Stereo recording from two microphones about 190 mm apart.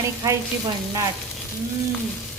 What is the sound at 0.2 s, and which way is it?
Speech, 20° right (ahead or behind).